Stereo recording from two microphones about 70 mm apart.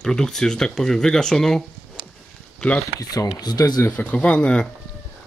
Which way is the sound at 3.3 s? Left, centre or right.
Left.